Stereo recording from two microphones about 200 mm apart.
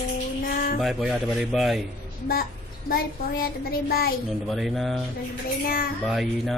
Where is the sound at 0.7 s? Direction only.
Centre (ahead or behind).